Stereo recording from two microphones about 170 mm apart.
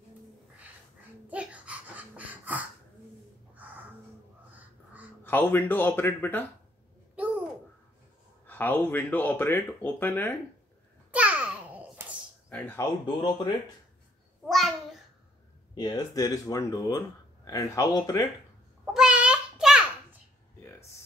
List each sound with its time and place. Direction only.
1.3 s a sound: 10° right (ahead or behind)
5.2 s speech: 10° left (ahead or behind)
8.5 s speech: 10° left (ahead or behind)
11.1 s babbling: 10° right (ahead or behind)
12.4 s speech: 10° left (ahead or behind)
13.0 s speech: 25° left (ahead or behind)
14.4 s a sound: centre (ahead or behind)
15.7 s speech: 25° left (ahead or behind)
18.9 s a sound: 5° right (ahead or behind)